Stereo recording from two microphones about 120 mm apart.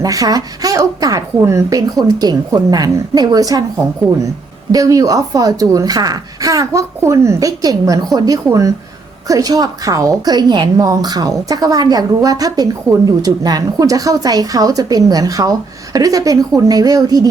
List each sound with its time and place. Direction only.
0.0 s a woman's voice: 30° right (ahead or behind)
4.7 s a woman's voice: 30° right (ahead or behind)